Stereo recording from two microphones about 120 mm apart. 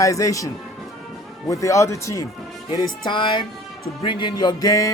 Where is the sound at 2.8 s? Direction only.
40° left (ahead or behind).